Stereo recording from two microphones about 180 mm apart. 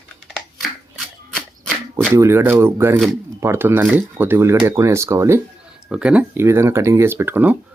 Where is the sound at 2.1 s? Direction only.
15° right (ahead or behind).